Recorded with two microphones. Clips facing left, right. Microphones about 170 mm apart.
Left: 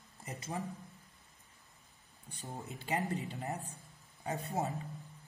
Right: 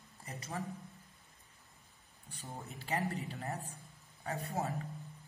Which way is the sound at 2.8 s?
20° left (ahead or behind).